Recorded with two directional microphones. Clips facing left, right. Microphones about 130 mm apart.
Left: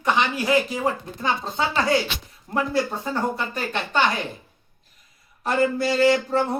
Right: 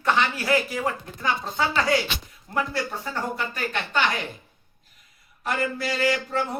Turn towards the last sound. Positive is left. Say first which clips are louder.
# left 6 dB
turn(degrees=30)  # may be behind; listen again after turning